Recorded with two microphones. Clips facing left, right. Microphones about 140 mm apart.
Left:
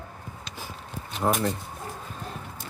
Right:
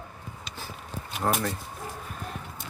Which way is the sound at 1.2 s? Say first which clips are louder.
Left 3 dB; 20° left (ahead or behind).